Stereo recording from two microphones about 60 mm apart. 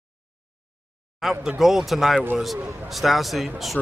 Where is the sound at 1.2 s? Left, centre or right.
Centre.